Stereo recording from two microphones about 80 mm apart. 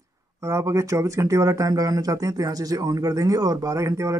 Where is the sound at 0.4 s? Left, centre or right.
Right.